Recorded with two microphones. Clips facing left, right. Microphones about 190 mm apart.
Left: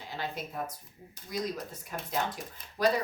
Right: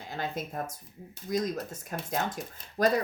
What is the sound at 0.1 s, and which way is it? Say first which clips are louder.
Speech: right 3 dB; 45° right (ahead or behind).